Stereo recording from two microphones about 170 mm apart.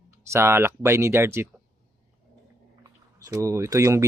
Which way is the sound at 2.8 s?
20° right (ahead or behind).